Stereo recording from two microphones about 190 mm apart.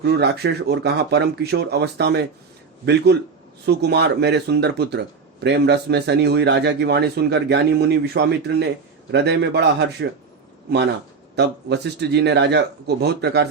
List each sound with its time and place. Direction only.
0.0 s speech: 60° right (ahead or behind)
3.7 s speech: 60° right (ahead or behind)
11.3 s speech: 60° right (ahead or behind)